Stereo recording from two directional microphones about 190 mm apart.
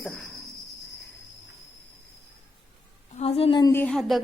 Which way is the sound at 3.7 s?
10° left (ahead or behind).